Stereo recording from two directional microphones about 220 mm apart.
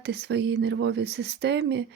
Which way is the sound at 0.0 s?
45° right (ahead or behind).